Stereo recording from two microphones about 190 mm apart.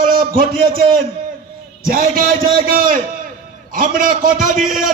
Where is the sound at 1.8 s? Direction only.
50° right (ahead or behind).